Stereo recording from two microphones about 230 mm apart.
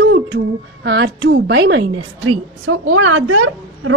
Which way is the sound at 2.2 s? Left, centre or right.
Right.